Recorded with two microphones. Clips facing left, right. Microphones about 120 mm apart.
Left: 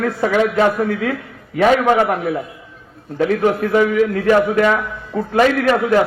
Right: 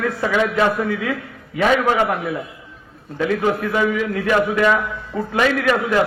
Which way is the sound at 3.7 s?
45° left (ahead or behind).